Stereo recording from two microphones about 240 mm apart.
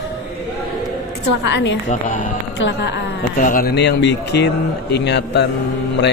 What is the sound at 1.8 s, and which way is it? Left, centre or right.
Speech, left.